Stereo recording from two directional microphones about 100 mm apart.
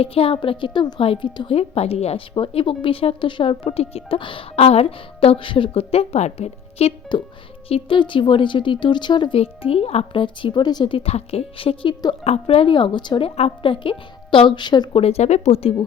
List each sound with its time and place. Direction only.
0.0 s speech: 70° left (ahead or behind)
1.5 s a woman's voice: 85° left
7.7 s speech: 55° left (ahead or behind)
9.4 s speech: 75° left (ahead or behind); by 10.9 s 45° left (ahead or behind)
10.9 s a woman's voice: 80° left; by 11.9 s 60° left (ahead or behind)
12.2 s a woman's voice: 85° left
12.7 s speech: 50° left (ahead or behind); by 13.7 s 80° left
13.7 s a woman's voice: 60° left (ahead or behind)
14.9 s speech: 85° left